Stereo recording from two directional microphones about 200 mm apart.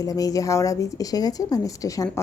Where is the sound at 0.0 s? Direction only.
15° left (ahead or behind).